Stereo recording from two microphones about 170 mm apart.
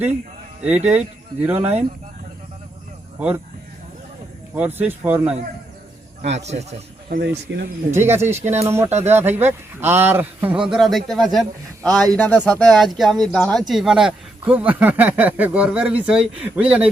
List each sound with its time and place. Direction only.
0.9 s speech: 10° right (ahead or behind)
3.2 s speech: 10° right (ahead or behind)
4.5 s speech: 10° right (ahead or behind)
6.2 s a man's voice: 40° right (ahead or behind)
7.1 s speech: 85° right
7.9 s speech: 15° right (ahead or behind)